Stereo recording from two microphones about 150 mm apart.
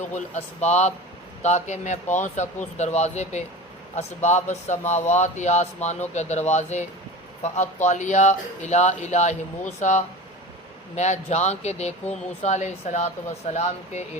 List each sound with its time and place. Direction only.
0.1 s speech: 50° left (ahead or behind)